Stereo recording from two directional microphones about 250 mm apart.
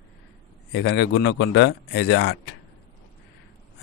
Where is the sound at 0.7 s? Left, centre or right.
Left.